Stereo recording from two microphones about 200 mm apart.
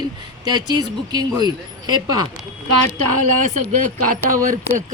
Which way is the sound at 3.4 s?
40° right (ahead or behind).